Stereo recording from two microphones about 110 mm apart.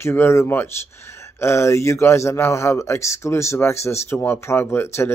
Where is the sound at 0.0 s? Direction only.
20° left (ahead or behind).